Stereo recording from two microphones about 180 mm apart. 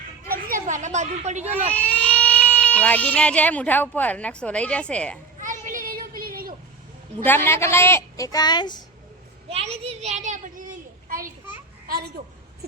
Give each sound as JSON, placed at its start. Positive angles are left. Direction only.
{"t": 0.3, "sound": "a sound", "side_deg": -50}
{"t": 1.7, "sound": "speech", "side_deg": 5}
{"t": 5.4, "sound": "children playing", "side_deg": -45}
{"t": 7.3, "sound": "a woman's voice", "side_deg": 10}
{"t": 9.5, "sound": "a child's voice", "side_deg": -35}